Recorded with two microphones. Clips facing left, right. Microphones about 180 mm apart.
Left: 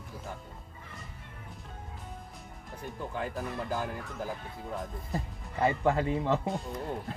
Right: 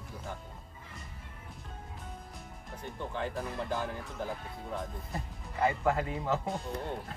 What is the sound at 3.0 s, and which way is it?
Speech, 5° left (ahead or behind).